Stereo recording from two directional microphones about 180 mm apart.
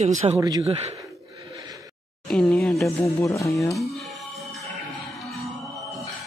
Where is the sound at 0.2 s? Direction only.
25° right (ahead or behind).